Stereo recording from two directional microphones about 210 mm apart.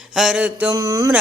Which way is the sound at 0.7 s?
15° right (ahead or behind).